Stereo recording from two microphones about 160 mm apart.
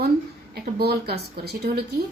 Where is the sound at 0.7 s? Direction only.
80° right.